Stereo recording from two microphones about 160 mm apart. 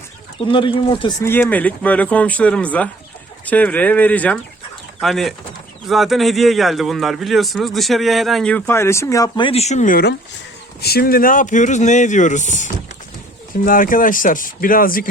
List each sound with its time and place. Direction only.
0.3 s speech: 30° left (ahead or behind)
1.2 s a man's voice: 10° left (ahead or behind); by 10.0 s 50° left (ahead or behind)
10.8 s speech: 75° left (ahead or behind); by 15.0 s 60° left (ahead or behind)